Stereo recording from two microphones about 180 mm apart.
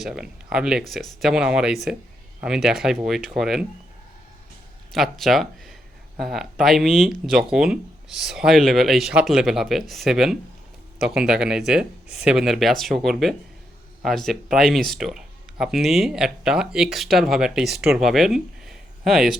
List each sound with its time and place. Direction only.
0.0 s speech: 5° right (ahead or behind)
4.9 s speech: centre (ahead or behind)